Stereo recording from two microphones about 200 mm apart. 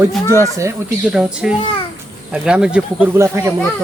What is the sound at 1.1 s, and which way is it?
Speech, 5° right (ahead or behind).